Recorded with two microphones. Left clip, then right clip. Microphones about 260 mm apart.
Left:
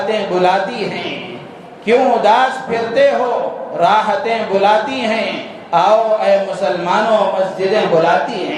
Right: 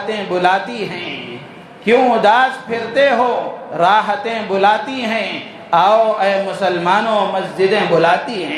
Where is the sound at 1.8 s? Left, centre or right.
Right.